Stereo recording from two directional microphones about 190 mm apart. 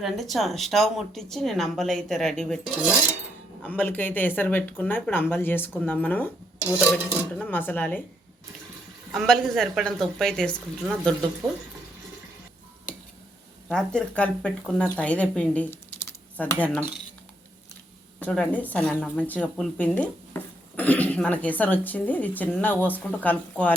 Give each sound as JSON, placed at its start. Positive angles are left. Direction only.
{"t": 0.0, "sound": "a woman's voice", "side_deg": 0}
{"t": 9.1, "sound": "speech", "side_deg": 0}
{"t": 11.4, "sound": "speech", "side_deg": -20}
{"t": 13.7, "sound": "a woman's voice", "side_deg": 5}
{"t": 18.2, "sound": "a woman's voice", "side_deg": 5}